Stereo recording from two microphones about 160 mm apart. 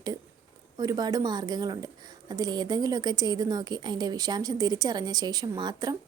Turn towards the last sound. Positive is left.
turn(degrees=-25)  # may be behind; listen again after turning